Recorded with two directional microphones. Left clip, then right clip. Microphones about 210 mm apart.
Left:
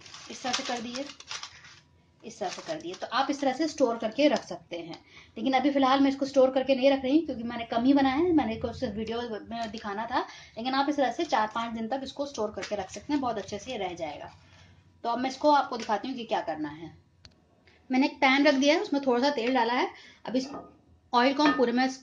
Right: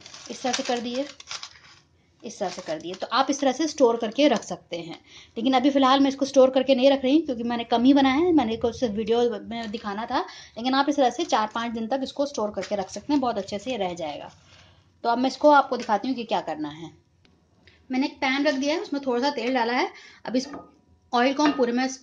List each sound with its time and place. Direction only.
0.4 s a woman's voice: 45° right (ahead or behind)
2.7 s speech: 15° right (ahead or behind)
3.0 s a woman's voice: 45° right (ahead or behind)
17.8 s a woman's voice: centre (ahead or behind)